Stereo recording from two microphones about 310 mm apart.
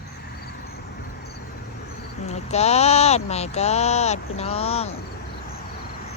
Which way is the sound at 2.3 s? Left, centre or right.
Left.